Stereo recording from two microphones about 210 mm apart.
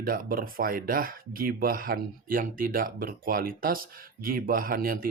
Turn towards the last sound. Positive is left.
turn(degrees=-45)  # may be behind; listen again after turning